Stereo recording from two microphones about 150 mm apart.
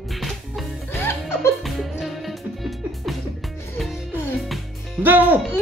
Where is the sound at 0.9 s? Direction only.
15° left (ahead or behind).